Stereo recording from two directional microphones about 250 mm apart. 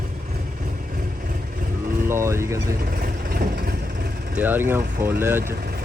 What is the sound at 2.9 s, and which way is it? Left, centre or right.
Vehicle, right.